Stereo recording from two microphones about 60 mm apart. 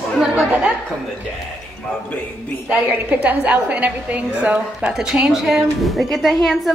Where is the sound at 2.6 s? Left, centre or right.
Right; by 6.7 s centre.